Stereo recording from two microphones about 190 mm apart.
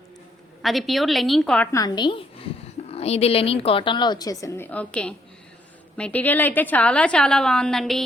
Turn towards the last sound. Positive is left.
turn(degrees=0)  # may be behind; listen again after turning